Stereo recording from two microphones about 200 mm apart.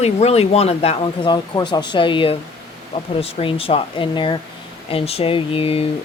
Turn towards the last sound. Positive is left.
turn(degrees=30)  # may be behind; listen again after turning